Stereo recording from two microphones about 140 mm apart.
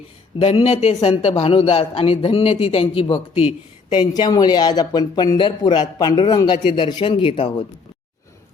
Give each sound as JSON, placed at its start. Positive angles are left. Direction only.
{"t": 0.3, "sound": "a man's voice", "side_deg": 45}
{"t": 3.9, "sound": "speech", "side_deg": 30}